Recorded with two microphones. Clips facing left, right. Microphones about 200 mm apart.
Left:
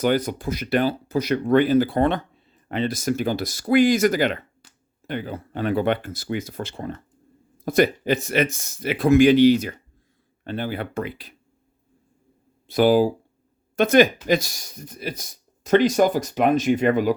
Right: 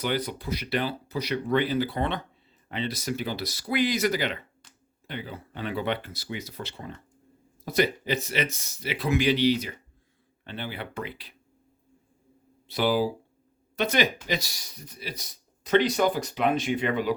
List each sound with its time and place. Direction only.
0.0 s speech: 45° left (ahead or behind)
12.6 s speech: 50° left (ahead or behind)